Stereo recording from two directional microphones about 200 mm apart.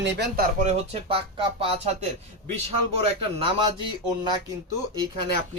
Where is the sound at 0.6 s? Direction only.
30° right (ahead or behind).